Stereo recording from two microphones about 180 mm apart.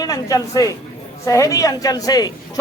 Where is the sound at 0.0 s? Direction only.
20° left (ahead or behind).